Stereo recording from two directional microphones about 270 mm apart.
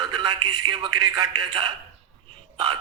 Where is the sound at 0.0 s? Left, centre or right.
Centre.